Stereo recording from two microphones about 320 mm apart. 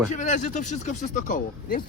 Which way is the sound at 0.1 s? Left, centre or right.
Left.